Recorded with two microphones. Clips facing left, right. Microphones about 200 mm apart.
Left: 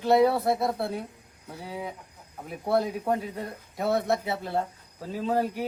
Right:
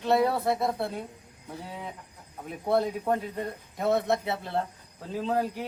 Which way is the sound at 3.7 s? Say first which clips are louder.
Even; centre (ahead or behind).